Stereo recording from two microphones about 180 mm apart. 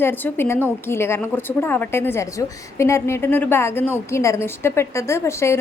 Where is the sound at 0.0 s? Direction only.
10° left (ahead or behind).